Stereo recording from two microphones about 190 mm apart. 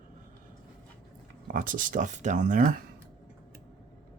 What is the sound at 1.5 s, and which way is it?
Speech, 45° right (ahead or behind).